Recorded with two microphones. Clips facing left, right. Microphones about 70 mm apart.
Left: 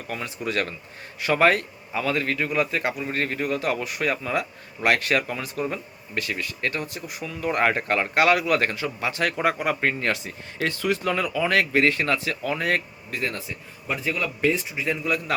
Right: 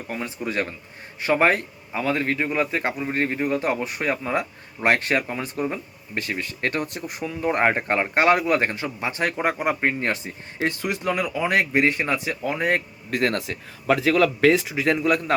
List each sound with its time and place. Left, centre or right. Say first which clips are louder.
0.1 s a man's voice: even; centre; by 7.3 s right
7.3 s a man's voice: right 2 dB; right
13.1 s a man's voice: right 8 dB; right
14.9 s a man's voice: right 4 dB; right